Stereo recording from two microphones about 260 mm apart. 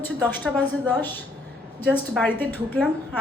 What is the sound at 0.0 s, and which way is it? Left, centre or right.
A woman's voice, centre.